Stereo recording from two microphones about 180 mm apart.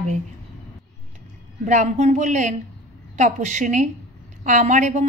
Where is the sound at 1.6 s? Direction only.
40° right (ahead or behind).